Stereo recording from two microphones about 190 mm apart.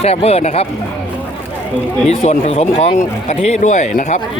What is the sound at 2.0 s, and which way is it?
Speech, 35° left (ahead or behind).